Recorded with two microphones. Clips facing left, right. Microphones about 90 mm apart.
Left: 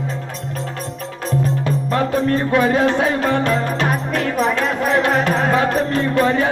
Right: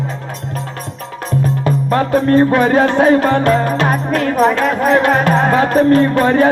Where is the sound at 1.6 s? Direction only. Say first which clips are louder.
Right 4 dB; 45° right (ahead or behind).